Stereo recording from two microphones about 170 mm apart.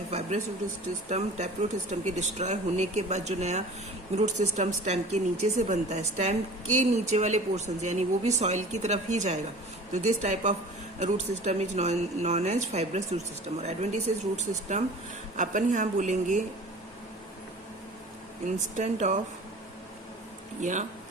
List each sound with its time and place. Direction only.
0.1 s a sound: 40° right (ahead or behind)
1.1 s speech: 40° right (ahead or behind)
18.8 s speech: 45° right (ahead or behind)
20.6 s speech: 45° right (ahead or behind)